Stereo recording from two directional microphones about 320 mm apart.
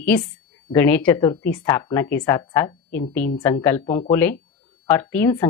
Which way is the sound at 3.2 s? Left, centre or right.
Left.